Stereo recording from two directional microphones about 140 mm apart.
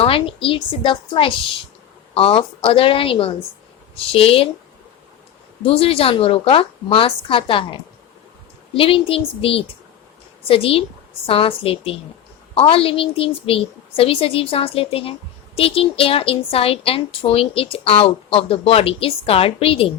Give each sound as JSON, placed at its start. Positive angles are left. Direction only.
{"t": 0.0, "sound": "a woman's voice", "side_deg": 40}
{"t": 5.6, "sound": "a woman's voice", "side_deg": 45}